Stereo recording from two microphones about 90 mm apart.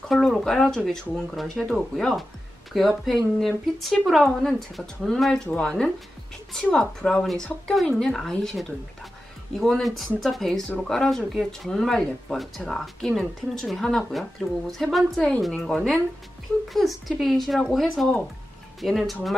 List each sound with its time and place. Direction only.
0.1 s speech: 5° left (ahead or behind)
15.6 s speech: 10° left (ahead or behind)
16.6 s speech: centre (ahead or behind)